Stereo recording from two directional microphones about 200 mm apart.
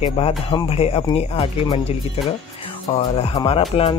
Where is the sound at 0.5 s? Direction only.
25° left (ahead or behind).